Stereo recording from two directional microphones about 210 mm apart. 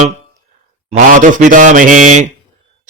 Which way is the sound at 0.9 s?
35° right (ahead or behind).